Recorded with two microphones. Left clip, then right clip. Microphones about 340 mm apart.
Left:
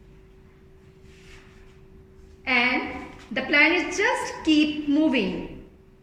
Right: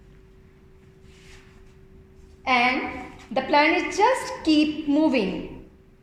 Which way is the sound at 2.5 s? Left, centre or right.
Centre.